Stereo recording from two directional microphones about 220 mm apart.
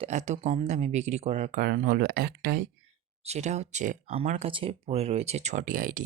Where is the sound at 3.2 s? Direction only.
30° right (ahead or behind).